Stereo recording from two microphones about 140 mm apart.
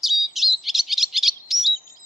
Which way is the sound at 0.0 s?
Centre (ahead or behind).